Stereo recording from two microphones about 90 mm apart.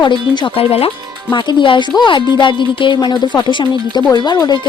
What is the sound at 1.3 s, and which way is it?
Speech, 60° left (ahead or behind).